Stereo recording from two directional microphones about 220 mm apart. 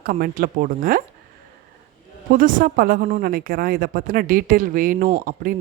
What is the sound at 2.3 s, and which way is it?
Speech, 40° right (ahead or behind).